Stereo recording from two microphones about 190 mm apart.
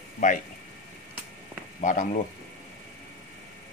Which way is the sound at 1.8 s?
45° left (ahead or behind).